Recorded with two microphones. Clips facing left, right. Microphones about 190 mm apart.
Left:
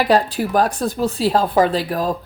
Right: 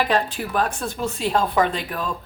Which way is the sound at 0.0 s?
35° left (ahead or behind).